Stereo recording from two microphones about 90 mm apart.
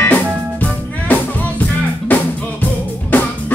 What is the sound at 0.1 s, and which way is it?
Music, 20° left (ahead or behind).